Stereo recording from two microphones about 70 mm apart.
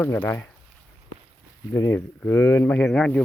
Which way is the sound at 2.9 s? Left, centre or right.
Centre.